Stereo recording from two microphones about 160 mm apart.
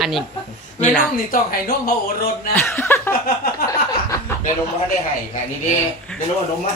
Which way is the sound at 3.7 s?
20° left (ahead or behind).